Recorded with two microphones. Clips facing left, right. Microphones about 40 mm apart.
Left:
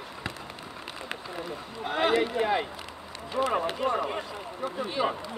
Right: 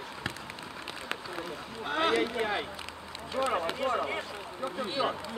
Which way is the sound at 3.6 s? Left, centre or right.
Centre.